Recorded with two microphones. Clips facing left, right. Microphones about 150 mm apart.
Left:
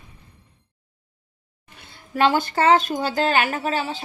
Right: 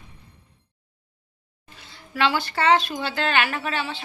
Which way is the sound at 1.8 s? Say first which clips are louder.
Left 4 dB; 50° left (ahead or behind).